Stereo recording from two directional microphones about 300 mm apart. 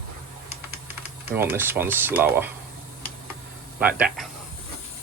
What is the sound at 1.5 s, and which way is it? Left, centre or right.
Speech, centre.